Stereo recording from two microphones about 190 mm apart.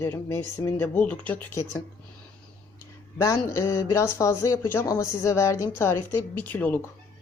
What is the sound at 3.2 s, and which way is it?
Speech, 15° left (ahead or behind).